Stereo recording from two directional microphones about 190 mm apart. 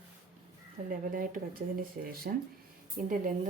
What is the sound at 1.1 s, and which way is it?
A woman's voice, 50° right (ahead or behind).